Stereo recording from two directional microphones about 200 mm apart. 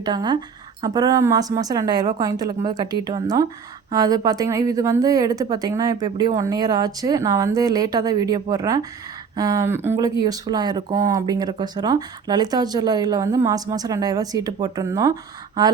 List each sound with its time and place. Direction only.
0.0 s speech: 20° right (ahead or behind)